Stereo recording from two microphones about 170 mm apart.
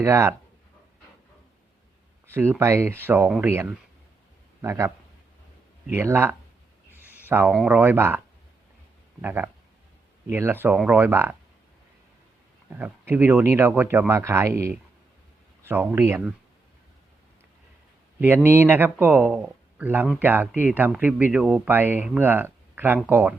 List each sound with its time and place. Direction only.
0.0 s speech: 15° right (ahead or behind)
2.2 s speech: 15° right (ahead or behind)
5.9 s speech: 15° right (ahead or behind)
6.9 s a sound: 10° right (ahead or behind)
7.5 s speech: 5° right (ahead or behind)
9.2 s speech: 10° right (ahead or behind)
12.7 s speech: 10° right (ahead or behind)
18.4 s speech: 15° right (ahead or behind)